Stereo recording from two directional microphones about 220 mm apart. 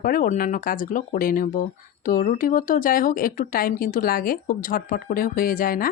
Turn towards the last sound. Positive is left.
turn(degrees=40)  # may be behind; listen again after turning